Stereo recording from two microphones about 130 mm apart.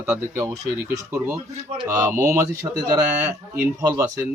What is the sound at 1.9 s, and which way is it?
Speech, 20° right (ahead or behind).